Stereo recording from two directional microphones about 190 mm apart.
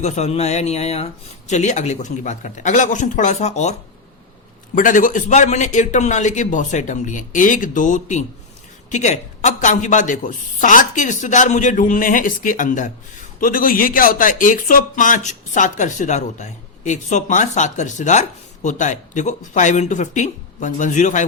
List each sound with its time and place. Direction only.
0.0 s speech: 35° left (ahead or behind)